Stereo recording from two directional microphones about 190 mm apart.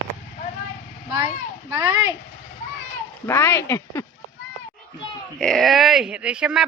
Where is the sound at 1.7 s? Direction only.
15° right (ahead or behind).